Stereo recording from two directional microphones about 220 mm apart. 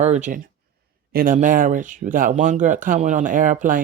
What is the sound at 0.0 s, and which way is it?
Speech, 30° right (ahead or behind).